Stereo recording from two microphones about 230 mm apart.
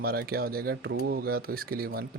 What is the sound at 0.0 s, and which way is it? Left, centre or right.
Speech, right.